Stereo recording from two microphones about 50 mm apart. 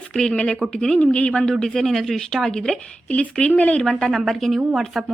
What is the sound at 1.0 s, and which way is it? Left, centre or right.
Speech, left.